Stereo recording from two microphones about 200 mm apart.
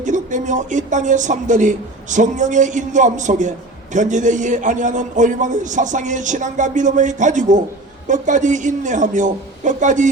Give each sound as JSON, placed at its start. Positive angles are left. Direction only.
{"t": 0.0, "sound": "a man's voice", "side_deg": -40}